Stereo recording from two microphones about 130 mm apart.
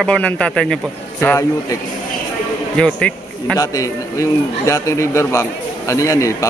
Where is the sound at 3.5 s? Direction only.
25° left (ahead or behind).